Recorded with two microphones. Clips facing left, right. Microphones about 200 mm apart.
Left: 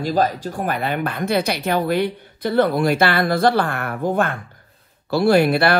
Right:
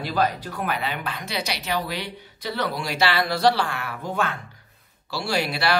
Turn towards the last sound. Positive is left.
turn(degrees=55)  # may be behind; listen again after turning